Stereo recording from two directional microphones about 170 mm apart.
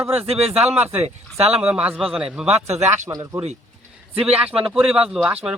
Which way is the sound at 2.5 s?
40° right (ahead or behind).